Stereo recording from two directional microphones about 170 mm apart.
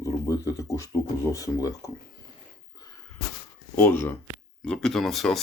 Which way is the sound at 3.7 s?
15° left (ahead or behind).